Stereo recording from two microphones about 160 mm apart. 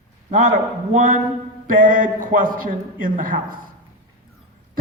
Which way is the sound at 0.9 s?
50° right (ahead or behind).